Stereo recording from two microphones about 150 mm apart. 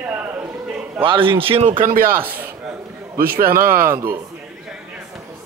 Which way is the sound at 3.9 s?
15° right (ahead or behind).